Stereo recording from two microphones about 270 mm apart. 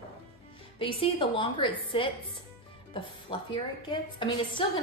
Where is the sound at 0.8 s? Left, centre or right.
Centre.